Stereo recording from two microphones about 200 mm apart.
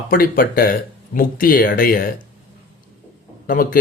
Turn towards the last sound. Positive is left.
turn(degrees=45)  # may be behind; listen again after turning